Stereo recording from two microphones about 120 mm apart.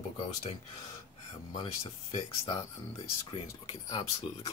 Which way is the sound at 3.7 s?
45° left (ahead or behind).